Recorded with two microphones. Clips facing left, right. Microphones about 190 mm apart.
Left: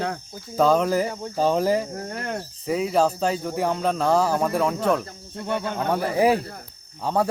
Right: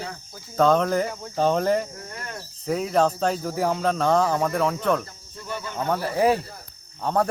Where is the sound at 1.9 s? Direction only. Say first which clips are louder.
Left 7 dB; 60° left (ahead or behind).